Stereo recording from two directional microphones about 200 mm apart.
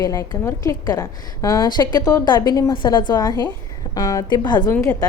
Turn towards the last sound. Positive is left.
turn(degrees=20)  # may be behind; listen again after turning